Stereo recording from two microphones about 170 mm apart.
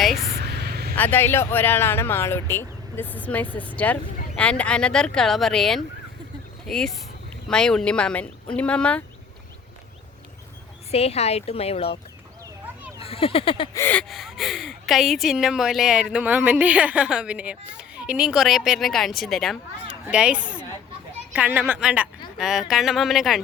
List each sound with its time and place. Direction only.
0.0 s a sound: centre (ahead or behind)
0.3 s a sound: 75° right (ahead or behind)
0.9 s speech: 10° left (ahead or behind)
10.9 s speech: 35° left (ahead or behind)
13.0 s speech: 35° left (ahead or behind)
13.7 s a woman's voice: 10° left (ahead or behind)